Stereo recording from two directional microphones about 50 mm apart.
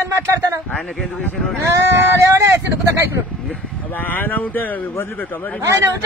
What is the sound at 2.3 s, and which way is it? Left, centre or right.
Vehicle, right.